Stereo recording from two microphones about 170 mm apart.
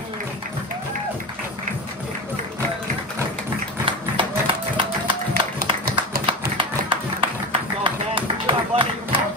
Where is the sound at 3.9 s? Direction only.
30° right (ahead or behind).